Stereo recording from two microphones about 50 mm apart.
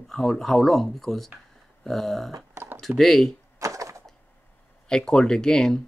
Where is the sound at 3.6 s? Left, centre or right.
Right.